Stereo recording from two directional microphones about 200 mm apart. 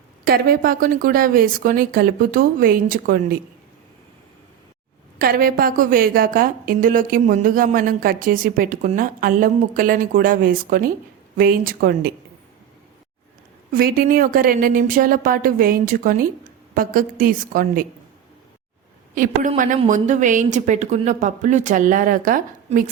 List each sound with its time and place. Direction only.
0.3 s a woman's voice: 45° right (ahead or behind)
5.2 s a woman's voice: 45° right (ahead or behind)
13.7 s a woman's voice: 45° right (ahead or behind)
19.1 s a woman's voice: 40° right (ahead or behind)